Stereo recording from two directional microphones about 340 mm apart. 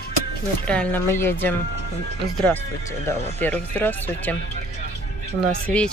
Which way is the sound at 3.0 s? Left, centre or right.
Centre.